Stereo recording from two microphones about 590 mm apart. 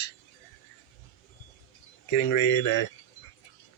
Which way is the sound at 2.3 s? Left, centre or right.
Left.